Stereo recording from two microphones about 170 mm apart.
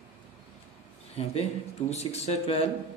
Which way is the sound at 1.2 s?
35° left (ahead or behind).